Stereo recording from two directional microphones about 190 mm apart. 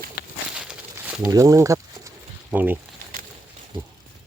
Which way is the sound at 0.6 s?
5° right (ahead or behind).